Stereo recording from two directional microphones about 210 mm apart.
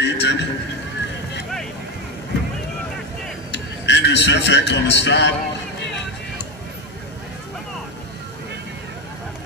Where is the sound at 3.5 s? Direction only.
55° left (ahead or behind).